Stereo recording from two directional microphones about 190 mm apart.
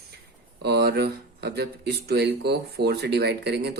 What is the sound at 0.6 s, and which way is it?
Speech, 60° right (ahead or behind).